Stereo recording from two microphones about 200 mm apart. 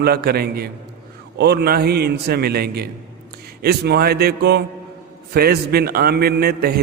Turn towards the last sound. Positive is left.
turn(degrees=-50)  # may be behind; listen again after turning